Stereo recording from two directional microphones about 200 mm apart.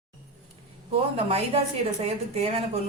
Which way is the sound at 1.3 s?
30° right (ahead or behind).